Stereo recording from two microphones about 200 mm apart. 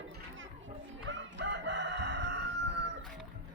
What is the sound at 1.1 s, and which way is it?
Crowing, 65° right (ahead or behind).